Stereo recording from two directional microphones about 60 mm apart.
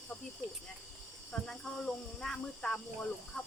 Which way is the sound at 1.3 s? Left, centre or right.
Centre.